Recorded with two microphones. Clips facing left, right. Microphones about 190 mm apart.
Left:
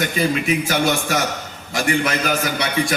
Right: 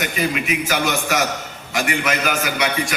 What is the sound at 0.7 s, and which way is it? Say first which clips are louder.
A man's voice: left 1 dB; 35° left (ahead or behind).